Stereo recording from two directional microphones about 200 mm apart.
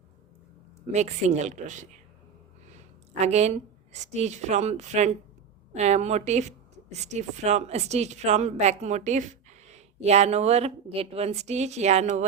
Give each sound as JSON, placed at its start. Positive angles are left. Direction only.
{"t": 0.9, "sound": "speech", "side_deg": -35}